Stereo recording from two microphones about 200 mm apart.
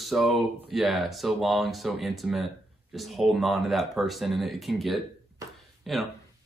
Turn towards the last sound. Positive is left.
turn(degrees=0)  # may be behind; listen again after turning